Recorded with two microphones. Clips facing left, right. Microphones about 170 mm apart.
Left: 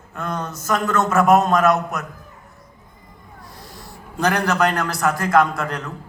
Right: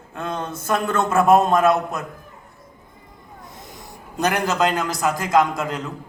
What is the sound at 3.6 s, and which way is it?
A man's voice, 20° right (ahead or behind).